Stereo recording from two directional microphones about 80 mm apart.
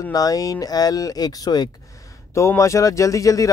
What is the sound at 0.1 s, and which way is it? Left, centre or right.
Speech, left.